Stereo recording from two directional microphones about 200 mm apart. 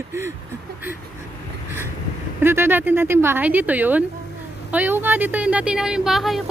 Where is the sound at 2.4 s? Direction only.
10° right (ahead or behind).